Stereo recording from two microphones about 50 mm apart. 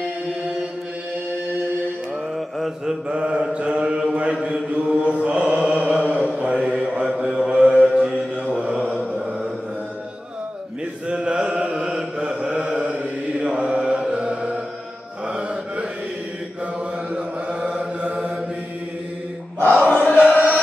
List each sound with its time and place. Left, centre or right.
2.3 s mantra: centre
3.2 s mantra: right
5.7 s chant: right
6.3 s mantra: right
11.1 s mantra: centre
17.1 s chant: right
19.9 s choir: left